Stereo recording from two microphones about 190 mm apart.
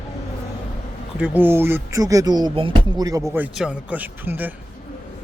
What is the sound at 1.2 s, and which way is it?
Speech, 10° right (ahead or behind).